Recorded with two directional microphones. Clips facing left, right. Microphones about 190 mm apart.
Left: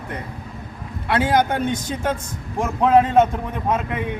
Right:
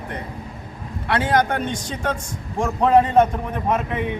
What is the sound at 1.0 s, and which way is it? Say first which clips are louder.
A man's voice: left 1 dB; 5° left (ahead or behind).